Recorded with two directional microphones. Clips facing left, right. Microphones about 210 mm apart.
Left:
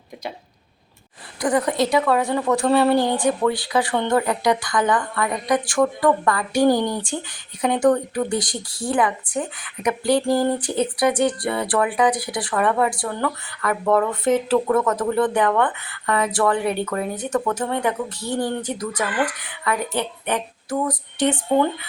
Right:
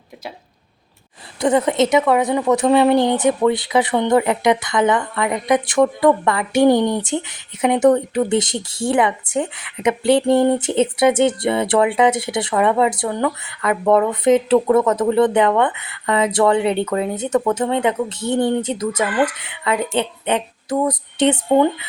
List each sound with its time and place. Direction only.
1.4 s a woman's voice: 25° right (ahead or behind)